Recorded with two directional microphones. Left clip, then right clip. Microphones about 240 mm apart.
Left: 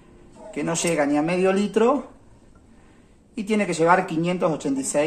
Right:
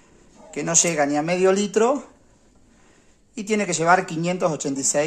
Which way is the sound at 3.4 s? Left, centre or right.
Right.